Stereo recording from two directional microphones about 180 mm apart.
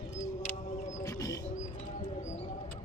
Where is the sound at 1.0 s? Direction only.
20° left (ahead or behind).